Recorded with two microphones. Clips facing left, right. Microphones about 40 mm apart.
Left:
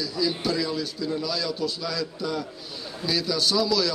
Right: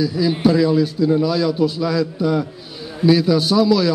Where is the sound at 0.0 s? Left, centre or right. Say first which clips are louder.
Right 10 dB; right.